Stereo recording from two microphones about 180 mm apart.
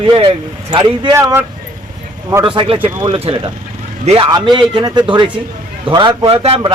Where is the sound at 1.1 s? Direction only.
15° right (ahead or behind).